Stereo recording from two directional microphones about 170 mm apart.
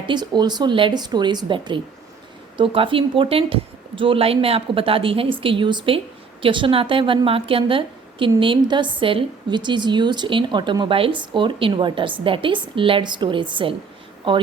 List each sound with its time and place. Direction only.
0.1 s a woman's voice: 25° right (ahead or behind)